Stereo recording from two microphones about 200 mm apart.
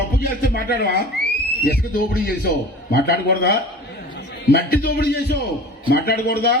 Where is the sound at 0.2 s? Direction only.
50° left (ahead or behind).